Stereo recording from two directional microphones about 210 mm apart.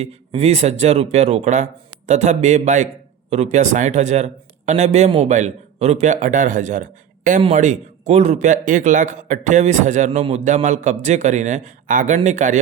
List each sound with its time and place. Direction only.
0.0 s speech: 30° right (ahead or behind)